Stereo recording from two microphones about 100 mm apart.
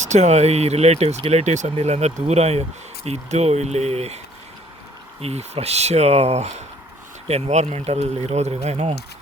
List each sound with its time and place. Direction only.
0.3 s speech: 90° right
5.2 s speech: 90° right